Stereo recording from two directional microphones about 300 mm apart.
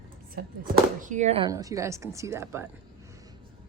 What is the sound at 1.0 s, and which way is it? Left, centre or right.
A woman's voice, right.